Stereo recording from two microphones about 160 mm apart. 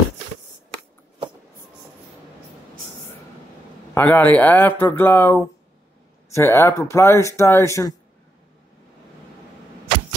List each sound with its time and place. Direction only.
3.9 s speech: 10° left (ahead or behind)